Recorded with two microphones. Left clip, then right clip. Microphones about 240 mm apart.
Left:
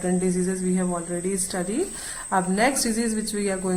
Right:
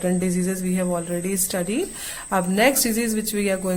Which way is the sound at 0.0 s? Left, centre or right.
Right.